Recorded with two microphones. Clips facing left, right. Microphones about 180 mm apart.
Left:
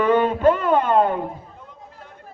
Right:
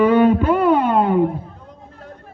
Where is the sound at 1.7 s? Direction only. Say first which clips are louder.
Right 4 dB; 40° right (ahead or behind).